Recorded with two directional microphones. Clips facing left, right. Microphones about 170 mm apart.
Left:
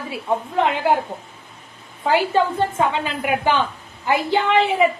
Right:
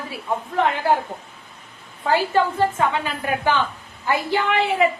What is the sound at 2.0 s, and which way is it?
A woman's voice, 15° left (ahead or behind).